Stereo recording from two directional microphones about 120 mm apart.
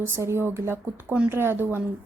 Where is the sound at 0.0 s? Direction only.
20° right (ahead or behind).